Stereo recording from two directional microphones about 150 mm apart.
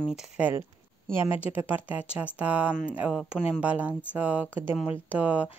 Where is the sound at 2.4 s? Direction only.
10° right (ahead or behind).